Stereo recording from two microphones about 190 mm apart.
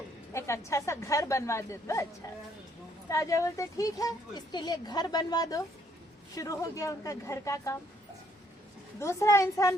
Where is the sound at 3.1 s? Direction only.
15° left (ahead or behind).